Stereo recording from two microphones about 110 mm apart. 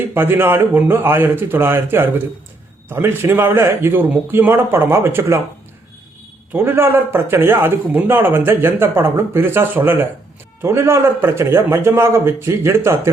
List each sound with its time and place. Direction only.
0.1 s a man's voice: 20° right (ahead or behind)
6.5 s a man's voice: 20° right (ahead or behind)